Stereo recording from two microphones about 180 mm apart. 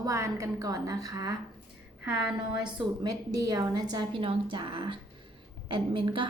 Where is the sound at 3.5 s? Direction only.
25° right (ahead or behind).